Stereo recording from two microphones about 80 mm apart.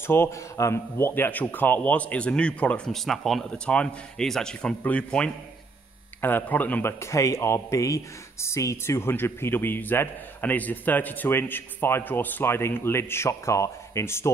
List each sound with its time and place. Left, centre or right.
0.0 s speech: left; by 2.9 s centre
2.9 s speech: centre
3.4 s a man's voice: centre; by 14.3 s left